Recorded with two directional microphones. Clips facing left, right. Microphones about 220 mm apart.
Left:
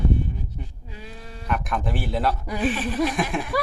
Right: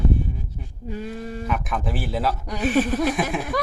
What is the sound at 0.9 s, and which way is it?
Speech, 50° right (ahead or behind).